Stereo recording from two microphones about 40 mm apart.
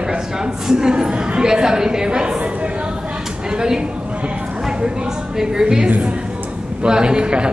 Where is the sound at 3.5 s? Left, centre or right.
Centre.